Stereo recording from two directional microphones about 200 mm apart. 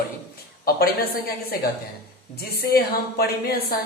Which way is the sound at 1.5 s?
50° left (ahead or behind).